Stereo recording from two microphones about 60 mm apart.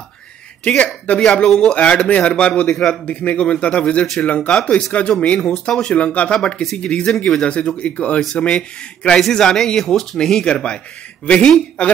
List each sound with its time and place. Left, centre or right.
0.7 s a man's voice: centre
1.2 s a man's voice: centre
5.2 s a man's voice: centre